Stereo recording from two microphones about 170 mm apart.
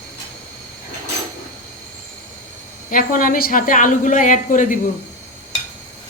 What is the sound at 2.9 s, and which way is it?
Speech, 55° left (ahead or behind).